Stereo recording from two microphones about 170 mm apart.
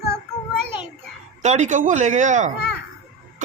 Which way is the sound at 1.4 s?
45° right (ahead or behind).